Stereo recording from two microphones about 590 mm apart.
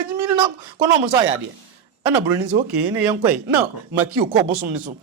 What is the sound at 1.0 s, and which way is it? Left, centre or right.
Speech, right.